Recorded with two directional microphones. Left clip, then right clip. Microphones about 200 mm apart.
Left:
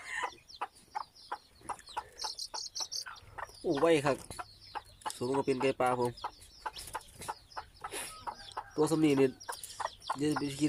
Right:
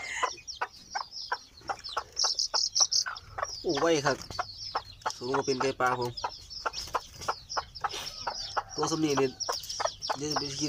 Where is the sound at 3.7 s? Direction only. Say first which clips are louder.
Right 1 dB; 10° left (ahead or behind).